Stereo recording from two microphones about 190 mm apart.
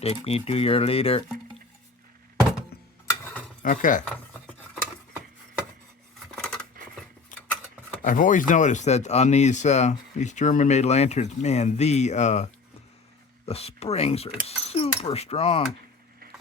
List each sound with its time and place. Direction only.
0.0 s speech: 30° left (ahead or behind)
3.1 s a sound: 10° left (ahead or behind)
3.6 s speech: 45° left (ahead or behind)
6.3 s scissors: 5° left (ahead or behind)
7.3 s a sound: 45° left (ahead or behind)
8.0 s speech: 45° left (ahead or behind)